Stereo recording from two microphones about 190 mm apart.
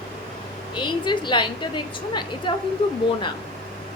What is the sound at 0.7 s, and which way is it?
A woman's voice, 25° left (ahead or behind).